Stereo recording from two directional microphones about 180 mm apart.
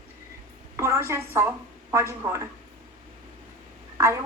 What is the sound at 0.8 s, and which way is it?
A woman's voice, 15° right (ahead or behind).